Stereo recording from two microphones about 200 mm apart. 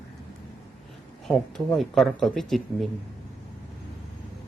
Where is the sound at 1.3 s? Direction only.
Centre (ahead or behind).